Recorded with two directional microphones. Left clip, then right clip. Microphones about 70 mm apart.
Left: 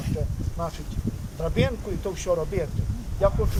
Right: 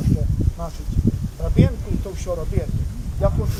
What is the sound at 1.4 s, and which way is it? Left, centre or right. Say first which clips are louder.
Speech: right 1 dB; left.